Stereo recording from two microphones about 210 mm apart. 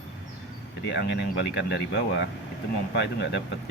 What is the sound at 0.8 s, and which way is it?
Speech, 55° left (ahead or behind).